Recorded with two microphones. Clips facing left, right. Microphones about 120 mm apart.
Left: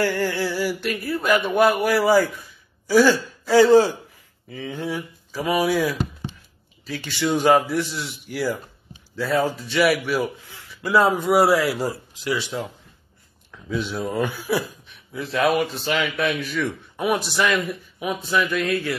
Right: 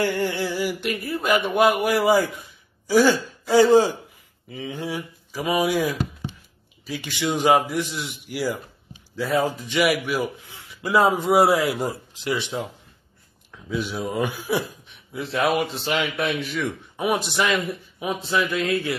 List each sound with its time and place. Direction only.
0.0 s a man's voice: 20° right (ahead or behind)
13.5 s a man's voice: 10° right (ahead or behind)